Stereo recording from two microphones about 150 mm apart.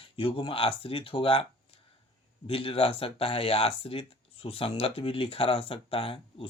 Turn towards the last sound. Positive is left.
turn(degrees=40)  # may be behind; listen again after turning